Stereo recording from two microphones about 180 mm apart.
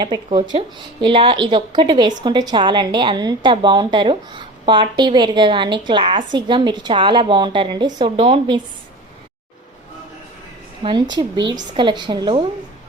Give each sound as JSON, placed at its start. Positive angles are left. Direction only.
{"t": 0.0, "sound": "a woman's voice", "side_deg": -25}
{"t": 10.8, "sound": "a woman's voice", "side_deg": -30}